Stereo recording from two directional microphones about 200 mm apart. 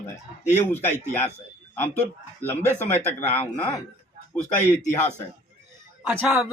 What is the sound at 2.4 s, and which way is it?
A man's voice, 10° left (ahead or behind).